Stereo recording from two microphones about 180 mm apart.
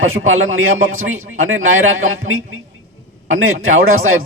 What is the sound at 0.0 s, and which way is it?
Speech, 90° right.